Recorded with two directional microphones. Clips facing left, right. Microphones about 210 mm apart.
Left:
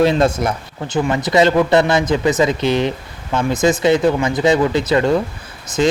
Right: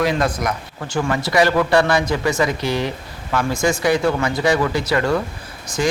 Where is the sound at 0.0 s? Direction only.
25° left (ahead or behind).